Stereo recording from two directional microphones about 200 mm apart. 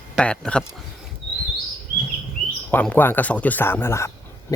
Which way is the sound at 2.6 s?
5° left (ahead or behind).